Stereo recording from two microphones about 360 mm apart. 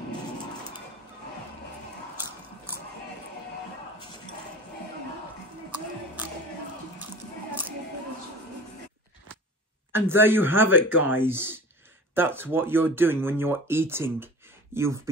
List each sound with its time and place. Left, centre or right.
9.9 s speech: centre